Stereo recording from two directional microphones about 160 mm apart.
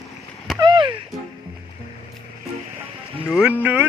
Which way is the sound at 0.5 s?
30° right (ahead or behind).